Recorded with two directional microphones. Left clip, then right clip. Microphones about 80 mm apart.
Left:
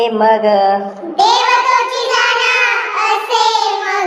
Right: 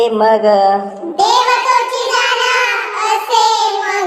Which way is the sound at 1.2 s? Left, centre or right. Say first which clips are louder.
Even; left.